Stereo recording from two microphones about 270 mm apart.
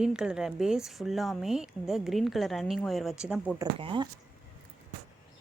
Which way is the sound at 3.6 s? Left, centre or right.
Centre.